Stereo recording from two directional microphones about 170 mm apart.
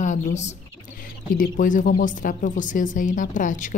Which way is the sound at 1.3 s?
50° left (ahead or behind).